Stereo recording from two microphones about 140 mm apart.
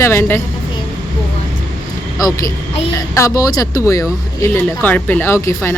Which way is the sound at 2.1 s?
25° left (ahead or behind).